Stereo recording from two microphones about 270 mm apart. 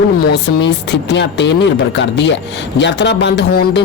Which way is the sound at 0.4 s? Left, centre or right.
Left.